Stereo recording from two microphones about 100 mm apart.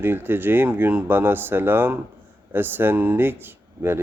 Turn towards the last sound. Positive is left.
turn(degrees=-25)  # may be behind; listen again after turning